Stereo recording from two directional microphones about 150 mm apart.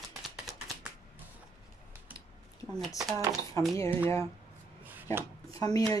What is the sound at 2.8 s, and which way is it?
Speech, centre (ahead or behind).